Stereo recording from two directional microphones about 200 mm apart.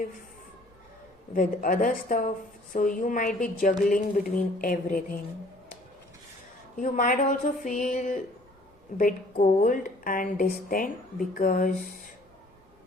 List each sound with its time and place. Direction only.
1.3 s a woman's voice: 45° left (ahead or behind)
6.7 s a woman's voice: 40° left (ahead or behind)